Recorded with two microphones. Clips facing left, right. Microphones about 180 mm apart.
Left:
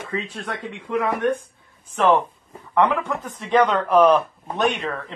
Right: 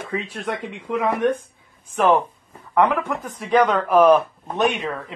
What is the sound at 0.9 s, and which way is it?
Speech, 20° right (ahead or behind).